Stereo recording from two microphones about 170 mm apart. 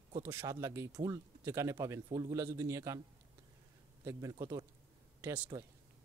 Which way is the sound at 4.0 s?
20° right (ahead or behind).